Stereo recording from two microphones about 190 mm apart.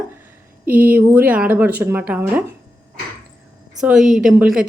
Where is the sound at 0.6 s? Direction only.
50° right (ahead or behind).